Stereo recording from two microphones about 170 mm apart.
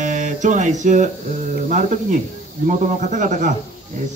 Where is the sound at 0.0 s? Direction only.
45° right (ahead or behind).